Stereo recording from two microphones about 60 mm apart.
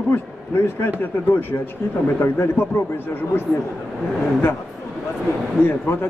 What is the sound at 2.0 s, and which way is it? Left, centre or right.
Speech, left.